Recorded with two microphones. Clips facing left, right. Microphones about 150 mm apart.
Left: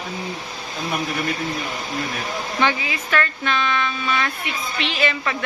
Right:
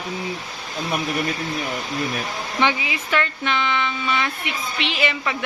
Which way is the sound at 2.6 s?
15° right (ahead or behind).